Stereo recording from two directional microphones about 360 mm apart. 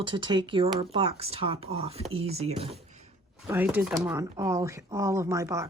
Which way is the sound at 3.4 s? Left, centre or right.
Centre.